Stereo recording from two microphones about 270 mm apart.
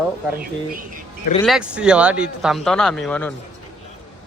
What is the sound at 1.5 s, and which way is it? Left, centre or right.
Speech, centre.